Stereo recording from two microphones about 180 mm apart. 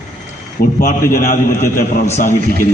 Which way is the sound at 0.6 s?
50° left (ahead or behind).